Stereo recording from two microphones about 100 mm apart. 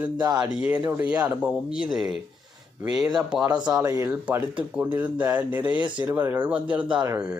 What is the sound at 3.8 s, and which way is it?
Speech, 30° right (ahead or behind).